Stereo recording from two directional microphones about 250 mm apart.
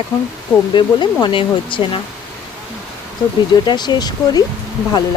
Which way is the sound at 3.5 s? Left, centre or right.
Centre.